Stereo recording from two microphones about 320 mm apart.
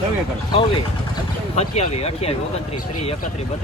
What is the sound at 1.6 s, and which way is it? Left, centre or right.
Speech, centre.